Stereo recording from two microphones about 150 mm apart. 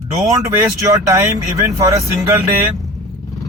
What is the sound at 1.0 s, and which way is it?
Speech, 20° right (ahead or behind).